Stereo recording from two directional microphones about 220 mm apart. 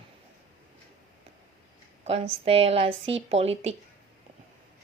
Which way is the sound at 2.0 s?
30° right (ahead or behind).